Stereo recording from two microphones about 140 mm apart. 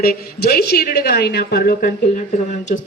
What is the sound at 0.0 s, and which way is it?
A man's voice, 90° left.